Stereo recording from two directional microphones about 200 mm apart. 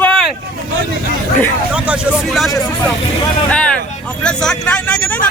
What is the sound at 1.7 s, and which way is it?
Speech, 5° right (ahead or behind).